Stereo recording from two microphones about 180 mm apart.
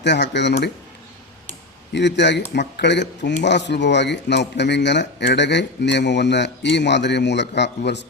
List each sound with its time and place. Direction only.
0.0 s speech: 75° left (ahead or behind)
1.9 s speech: 75° left (ahead or behind)